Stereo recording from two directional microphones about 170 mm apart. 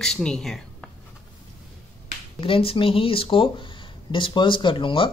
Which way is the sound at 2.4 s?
30° left (ahead or behind).